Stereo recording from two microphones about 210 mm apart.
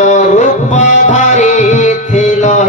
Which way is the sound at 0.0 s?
35° left (ahead or behind).